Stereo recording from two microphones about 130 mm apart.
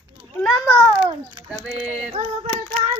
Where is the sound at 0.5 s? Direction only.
20° left (ahead or behind).